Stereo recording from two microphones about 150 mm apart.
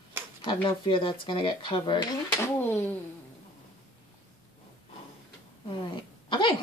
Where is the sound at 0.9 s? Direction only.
35° left (ahead or behind).